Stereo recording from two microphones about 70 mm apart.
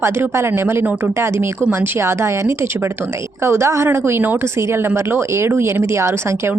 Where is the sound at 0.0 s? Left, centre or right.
Right.